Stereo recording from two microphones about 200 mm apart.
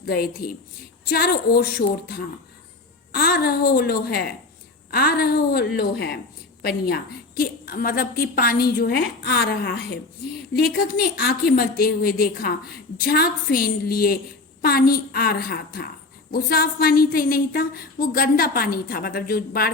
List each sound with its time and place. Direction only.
0.0 s a woman's voice: 50° left (ahead or behind)
3.1 s a woman's voice: 50° left (ahead or behind)